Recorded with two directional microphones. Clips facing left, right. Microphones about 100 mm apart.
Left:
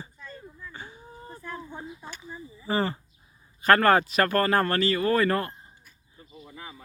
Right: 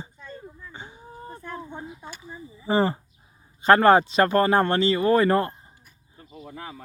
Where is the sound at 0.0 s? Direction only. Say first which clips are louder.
Right 3 dB; 25° right (ahead or behind).